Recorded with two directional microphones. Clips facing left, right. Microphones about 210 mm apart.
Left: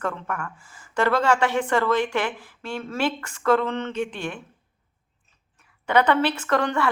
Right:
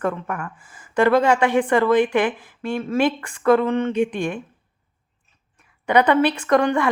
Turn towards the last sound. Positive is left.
turn(degrees=-10)  # may be behind; listen again after turning